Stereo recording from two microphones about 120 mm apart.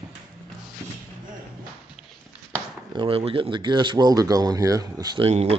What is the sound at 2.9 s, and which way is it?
Speech, 50° right (ahead or behind).